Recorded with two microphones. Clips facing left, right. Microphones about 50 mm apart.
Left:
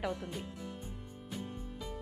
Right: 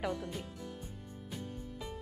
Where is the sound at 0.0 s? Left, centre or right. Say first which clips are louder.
Even; centre.